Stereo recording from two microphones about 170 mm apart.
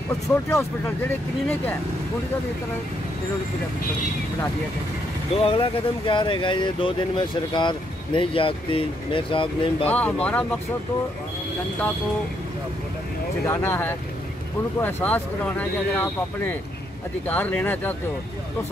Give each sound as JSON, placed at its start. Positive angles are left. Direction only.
{"t": 0.1, "sound": "speech", "side_deg": 15}
{"t": 5.4, "sound": "speech", "side_deg": 30}
{"t": 9.8, "sound": "speech", "side_deg": 10}
{"t": 13.5, "sound": "speech", "side_deg": 15}